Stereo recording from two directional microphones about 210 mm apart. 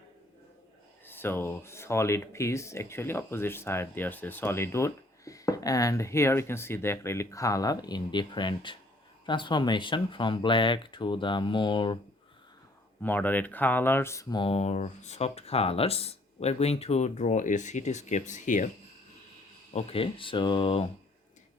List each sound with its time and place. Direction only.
1.0 s speech: 10° left (ahead or behind)
13.0 s speech: 10° left (ahead or behind); by 18.7 s 35° left (ahead or behind)
19.7 s speech: 25° left (ahead or behind)